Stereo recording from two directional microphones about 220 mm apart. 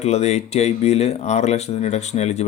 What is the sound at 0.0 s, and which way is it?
A man's voice, 30° left (ahead or behind).